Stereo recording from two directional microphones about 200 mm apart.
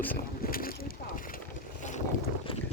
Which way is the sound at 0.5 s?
45° left (ahead or behind).